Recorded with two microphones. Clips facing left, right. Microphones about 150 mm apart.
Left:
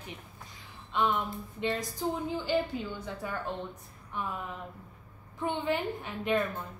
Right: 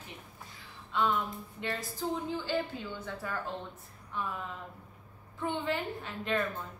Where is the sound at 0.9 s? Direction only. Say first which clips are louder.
Left 1 dB; 20° left (ahead or behind).